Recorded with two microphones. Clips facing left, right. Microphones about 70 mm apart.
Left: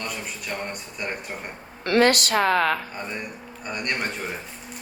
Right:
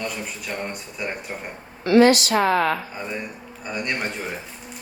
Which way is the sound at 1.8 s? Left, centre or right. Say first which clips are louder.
Right 4 dB; left.